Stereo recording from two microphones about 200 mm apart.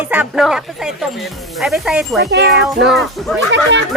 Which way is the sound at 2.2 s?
55° right (ahead or behind).